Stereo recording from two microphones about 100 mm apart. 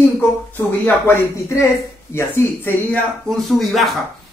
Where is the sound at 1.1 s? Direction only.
30° left (ahead or behind).